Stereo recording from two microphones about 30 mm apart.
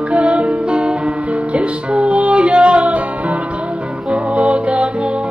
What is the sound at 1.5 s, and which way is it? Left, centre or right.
Music, right.